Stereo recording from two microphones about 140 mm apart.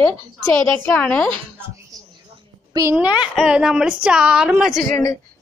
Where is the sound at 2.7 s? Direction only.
20° right (ahead or behind).